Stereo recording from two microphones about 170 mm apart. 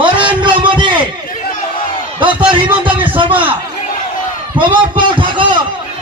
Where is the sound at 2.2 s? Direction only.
10° right (ahead or behind).